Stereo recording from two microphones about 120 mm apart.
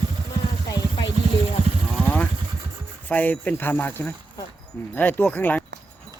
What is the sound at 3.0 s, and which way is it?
Speech, 15° left (ahead or behind).